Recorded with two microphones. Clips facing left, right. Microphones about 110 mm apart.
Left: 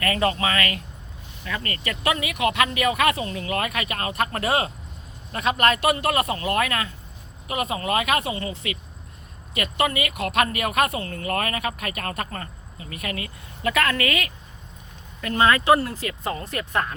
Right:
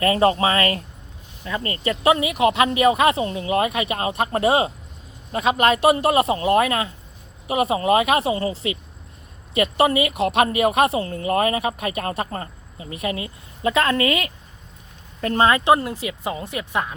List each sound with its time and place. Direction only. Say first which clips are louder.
0.0 s speech: right 6 dB; 30° right (ahead or behind); by 16.9 s 10° right (ahead or behind)